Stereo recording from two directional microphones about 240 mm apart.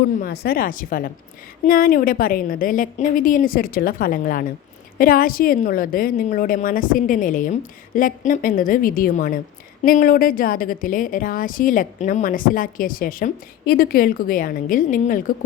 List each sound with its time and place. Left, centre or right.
0.2 s a woman's voice: left